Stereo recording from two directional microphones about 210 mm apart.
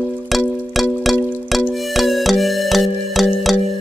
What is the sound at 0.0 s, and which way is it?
Music, 5° left (ahead or behind).